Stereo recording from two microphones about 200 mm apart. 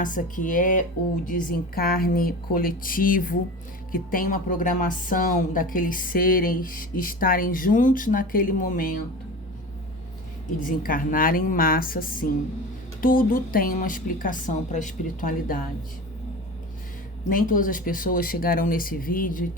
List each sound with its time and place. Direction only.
0.0 s a woman's voice: 40° left (ahead or behind)
10.7 s a woman's voice: 45° left (ahead or behind)
17.2 s a woman's voice: 45° left (ahead or behind)